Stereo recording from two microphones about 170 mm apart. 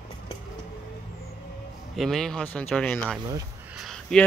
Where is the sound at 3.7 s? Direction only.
Centre (ahead or behind).